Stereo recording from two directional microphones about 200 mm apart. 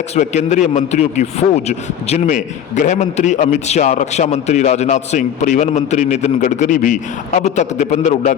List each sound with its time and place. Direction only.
0.2 s a man's voice: 35° left (ahead or behind)